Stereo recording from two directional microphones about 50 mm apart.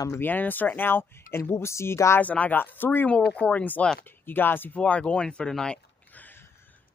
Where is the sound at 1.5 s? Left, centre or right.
Left.